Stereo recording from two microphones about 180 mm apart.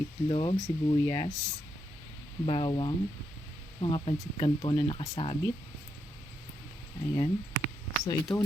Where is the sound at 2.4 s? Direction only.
30° left (ahead or behind).